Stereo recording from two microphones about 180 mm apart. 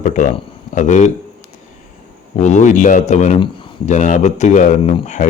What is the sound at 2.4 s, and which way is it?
Speech, 40° left (ahead or behind).